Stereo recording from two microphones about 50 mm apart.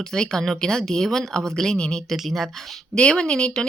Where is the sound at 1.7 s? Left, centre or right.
Centre.